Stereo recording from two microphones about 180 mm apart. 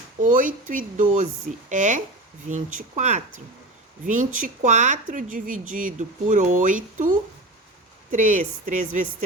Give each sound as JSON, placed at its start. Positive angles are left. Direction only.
{"t": 0.2, "sound": "speech", "side_deg": -45}